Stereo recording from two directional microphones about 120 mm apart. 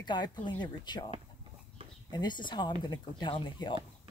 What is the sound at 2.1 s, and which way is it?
Speech, 40° left (ahead or behind).